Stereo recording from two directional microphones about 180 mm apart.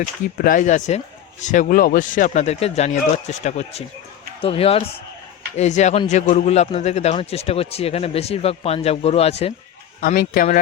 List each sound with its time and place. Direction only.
0.3 s a man's voice: 50° left (ahead or behind); by 9.5 s 35° left (ahead or behind)
10.0 s speech: 50° left (ahead or behind)